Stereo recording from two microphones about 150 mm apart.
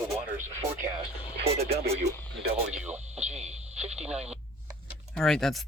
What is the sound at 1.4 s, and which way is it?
Speech, 40° right (ahead or behind).